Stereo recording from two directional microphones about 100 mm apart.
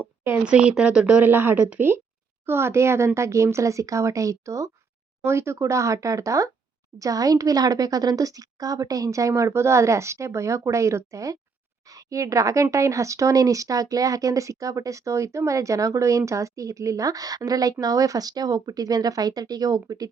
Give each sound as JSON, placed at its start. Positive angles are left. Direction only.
{"t": 0.4, "sound": "a woman's voice", "side_deg": -10}